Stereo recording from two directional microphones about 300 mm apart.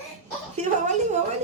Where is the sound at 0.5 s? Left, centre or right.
Right.